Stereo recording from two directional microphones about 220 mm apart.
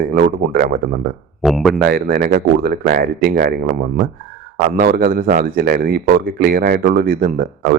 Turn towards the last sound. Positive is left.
turn(degrees=-40)  # may be behind; listen again after turning